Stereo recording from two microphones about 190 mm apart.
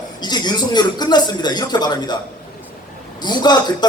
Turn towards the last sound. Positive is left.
turn(degrees=20)  # may be behind; listen again after turning